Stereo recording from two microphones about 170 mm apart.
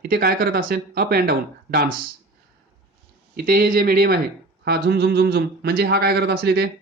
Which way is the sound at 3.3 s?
60° right (ahead or behind).